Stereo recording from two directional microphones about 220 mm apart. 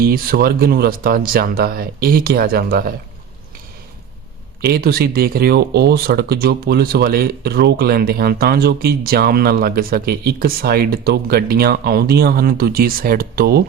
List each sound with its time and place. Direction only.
0.0 s speech: 45° right (ahead or behind)
4.6 s speech: 45° right (ahead or behind)